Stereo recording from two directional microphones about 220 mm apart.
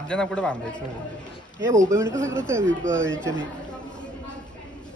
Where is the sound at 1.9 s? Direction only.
15° right (ahead or behind).